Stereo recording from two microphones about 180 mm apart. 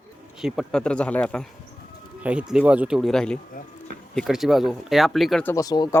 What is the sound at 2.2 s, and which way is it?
Speech, 5° right (ahead or behind).